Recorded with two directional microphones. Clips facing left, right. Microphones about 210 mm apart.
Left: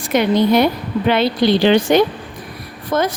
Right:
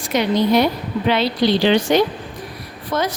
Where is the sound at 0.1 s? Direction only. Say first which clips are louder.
Left 3 dB; 55° left (ahead or behind).